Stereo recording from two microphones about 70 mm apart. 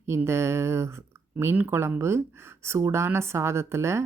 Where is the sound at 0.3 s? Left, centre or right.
Right.